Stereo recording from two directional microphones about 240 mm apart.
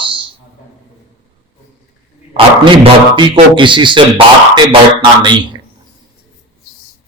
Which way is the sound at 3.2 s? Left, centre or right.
Centre.